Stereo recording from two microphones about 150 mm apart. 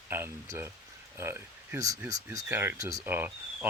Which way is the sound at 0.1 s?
15° right (ahead or behind).